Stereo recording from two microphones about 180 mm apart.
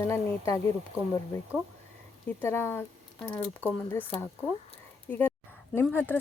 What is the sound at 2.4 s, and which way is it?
A woman's voice, 10° left (ahead or behind).